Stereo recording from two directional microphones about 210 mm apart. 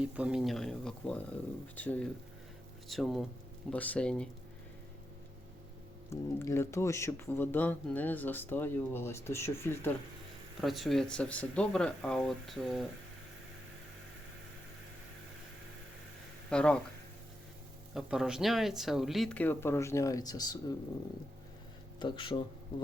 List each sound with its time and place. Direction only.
0.0 s speech: 5° right (ahead or behind)
6.1 s speech: 10° left (ahead or behind)
10.6 s speech: centre (ahead or behind)
16.5 s speech: 5° left (ahead or behind)
17.9 s speech: centre (ahead or behind); by 20.7 s 20° left (ahead or behind)
21.9 s speech: 25° left (ahead or behind)